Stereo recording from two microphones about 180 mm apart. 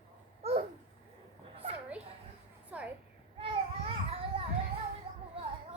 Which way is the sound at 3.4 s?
30° right (ahead or behind).